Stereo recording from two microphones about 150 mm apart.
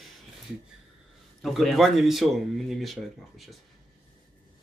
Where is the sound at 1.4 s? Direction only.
Centre (ahead or behind).